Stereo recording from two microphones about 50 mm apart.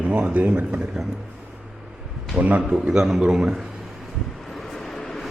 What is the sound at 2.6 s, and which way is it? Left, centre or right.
Speech, centre.